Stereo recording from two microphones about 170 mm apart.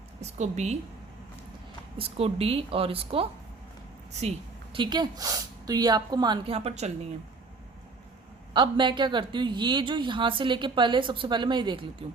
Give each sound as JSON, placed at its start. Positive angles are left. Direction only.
{"t": 0.2, "sound": "a woman's voice", "side_deg": -40}
{"t": 2.0, "sound": "a woman's voice", "side_deg": -35}
{"t": 4.7, "sound": "a woman's voice", "side_deg": -25}
{"t": 8.5, "sound": "a woman's voice", "side_deg": -30}